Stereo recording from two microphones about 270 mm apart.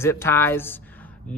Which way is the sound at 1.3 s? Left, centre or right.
Centre.